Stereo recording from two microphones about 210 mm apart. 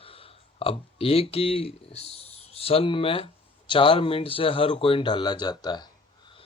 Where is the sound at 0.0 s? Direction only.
25° left (ahead or behind).